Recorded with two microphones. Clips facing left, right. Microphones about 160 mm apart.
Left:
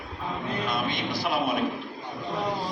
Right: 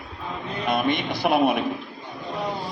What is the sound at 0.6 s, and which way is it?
Speech, 55° right (ahead or behind).